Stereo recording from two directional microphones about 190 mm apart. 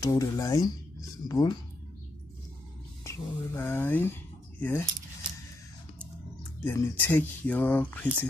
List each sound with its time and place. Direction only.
0.0 s speech: 20° left (ahead or behind)
3.0 s speech: 15° left (ahead or behind)
6.6 s speech: 15° left (ahead or behind)